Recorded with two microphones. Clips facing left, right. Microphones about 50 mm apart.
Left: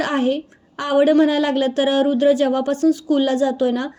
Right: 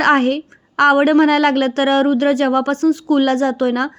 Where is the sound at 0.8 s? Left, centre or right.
Right.